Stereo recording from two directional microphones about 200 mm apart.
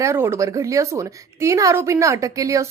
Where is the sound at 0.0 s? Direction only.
15° right (ahead or behind).